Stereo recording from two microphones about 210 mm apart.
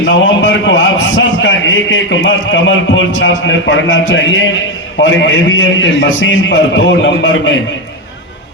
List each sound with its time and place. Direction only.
0.0 s a man's voice: 60° left (ahead or behind)